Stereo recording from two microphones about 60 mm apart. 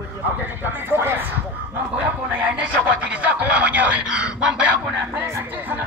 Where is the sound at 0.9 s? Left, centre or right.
Right.